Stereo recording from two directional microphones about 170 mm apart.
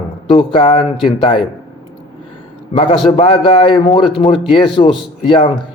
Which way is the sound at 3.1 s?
30° left (ahead or behind).